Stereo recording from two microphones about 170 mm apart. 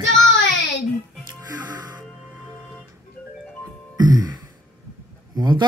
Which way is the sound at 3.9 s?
25° right (ahead or behind).